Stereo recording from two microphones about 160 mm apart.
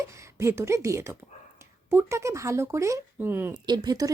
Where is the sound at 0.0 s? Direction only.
20° right (ahead or behind).